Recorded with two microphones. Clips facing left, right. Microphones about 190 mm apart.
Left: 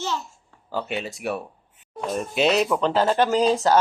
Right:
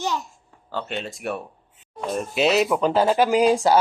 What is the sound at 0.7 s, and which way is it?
Speech, 5° left (ahead or behind).